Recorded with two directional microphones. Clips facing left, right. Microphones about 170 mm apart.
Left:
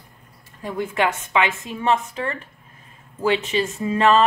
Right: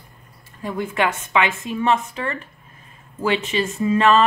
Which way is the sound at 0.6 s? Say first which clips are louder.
Even; 35° left (ahead or behind).